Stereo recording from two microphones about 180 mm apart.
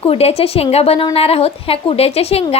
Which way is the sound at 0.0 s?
35° left (ahead or behind).